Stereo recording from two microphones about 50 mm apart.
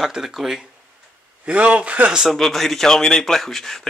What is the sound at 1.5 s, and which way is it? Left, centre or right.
Speech, right.